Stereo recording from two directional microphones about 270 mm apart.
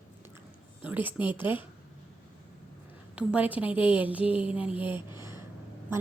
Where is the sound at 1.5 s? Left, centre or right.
Centre.